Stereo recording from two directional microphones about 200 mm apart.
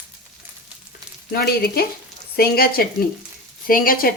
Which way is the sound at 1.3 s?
50° left (ahead or behind).